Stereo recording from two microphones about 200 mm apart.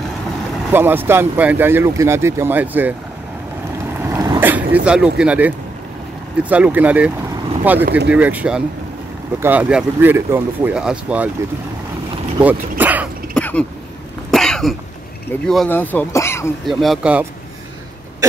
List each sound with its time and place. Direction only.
0.7 s speech: 10° right (ahead or behind)
4.0 s vehicle: 15° right (ahead or behind)
5.2 s speech: 5° right (ahead or behind)
6.5 s speech: 10° right (ahead or behind)
12.4 s dog: 10° right (ahead or behind)
13.3 s throat clearing: 5° left (ahead or behind)
14.3 s cough: centre (ahead or behind)
15.4 s speech: 5° left (ahead or behind)
16.6 s speech: centre (ahead or behind)